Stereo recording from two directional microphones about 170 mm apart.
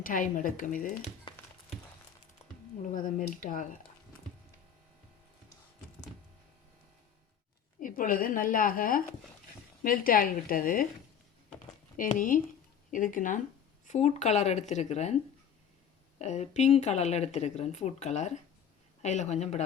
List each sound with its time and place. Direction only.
0.0 s speech: 50° left (ahead or behind)
2.9 s speech: 50° left (ahead or behind)
7.8 s a woman's voice: 55° left (ahead or behind)
11.9 s speech: 50° left (ahead or behind)
16.1 s speech: 40° left (ahead or behind)